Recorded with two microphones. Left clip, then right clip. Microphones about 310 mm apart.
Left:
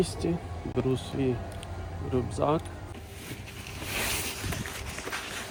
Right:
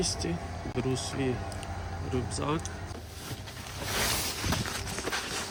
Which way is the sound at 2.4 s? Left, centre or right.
Centre.